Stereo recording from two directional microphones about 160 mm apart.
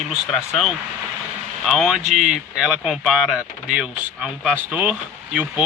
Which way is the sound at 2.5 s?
5° right (ahead or behind).